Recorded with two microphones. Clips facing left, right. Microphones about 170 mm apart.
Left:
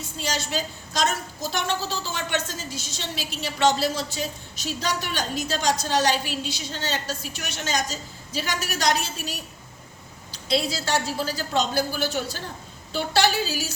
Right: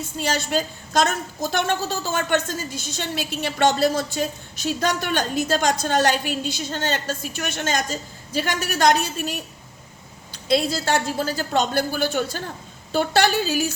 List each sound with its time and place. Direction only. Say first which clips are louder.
0.2 s a woman's voice: right 5 dB; 50° right (ahead or behind)